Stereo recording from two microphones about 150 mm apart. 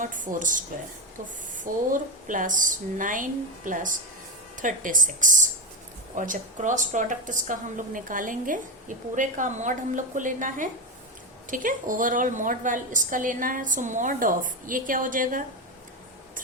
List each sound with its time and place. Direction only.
0.0 s a woman's voice: 60° right (ahead or behind)
1.6 s a woman's voice: 60° right (ahead or behind)